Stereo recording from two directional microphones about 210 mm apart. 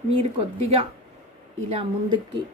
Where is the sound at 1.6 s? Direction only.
30° right (ahead or behind).